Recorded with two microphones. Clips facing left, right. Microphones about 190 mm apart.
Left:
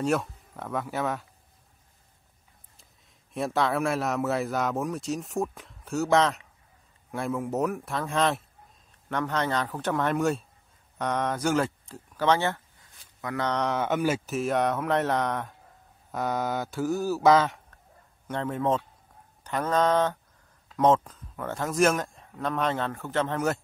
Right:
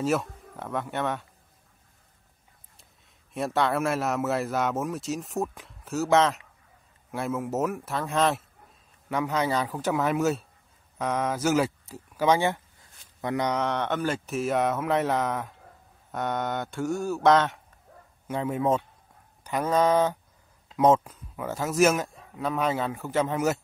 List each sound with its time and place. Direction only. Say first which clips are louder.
0.0 s speech: even; centre (ahead or behind)
3.3 s a man's voice: right 1 dB; centre (ahead or behind); by 13.5 s 25° right (ahead or behind)
13.5 s a man's voice: even; centre (ahead or behind)